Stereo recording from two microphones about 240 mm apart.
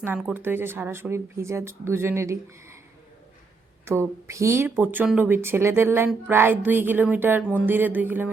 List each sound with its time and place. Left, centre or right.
0.0 s speech: centre
3.8 s speech: centre